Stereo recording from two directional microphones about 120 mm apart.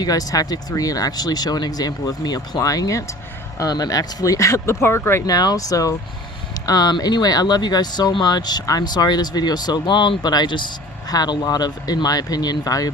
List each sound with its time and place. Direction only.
0.0 s speech: 30° left (ahead or behind)